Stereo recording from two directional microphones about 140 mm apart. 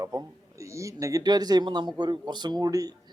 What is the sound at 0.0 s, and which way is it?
A man's voice, 25° right (ahead or behind).